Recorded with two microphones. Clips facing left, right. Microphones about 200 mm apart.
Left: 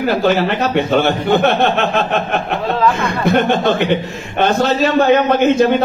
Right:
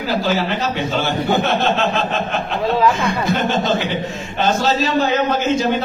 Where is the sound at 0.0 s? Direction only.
60° left (ahead or behind).